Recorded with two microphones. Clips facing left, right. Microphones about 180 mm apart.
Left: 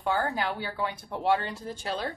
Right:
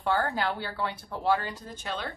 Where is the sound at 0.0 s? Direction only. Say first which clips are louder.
Right 1 dB; 15° left (ahead or behind).